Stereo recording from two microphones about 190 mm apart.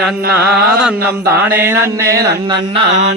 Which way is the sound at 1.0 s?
55° right (ahead or behind).